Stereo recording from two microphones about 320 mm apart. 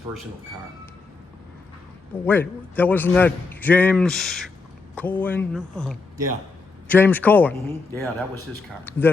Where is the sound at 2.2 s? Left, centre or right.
Centre.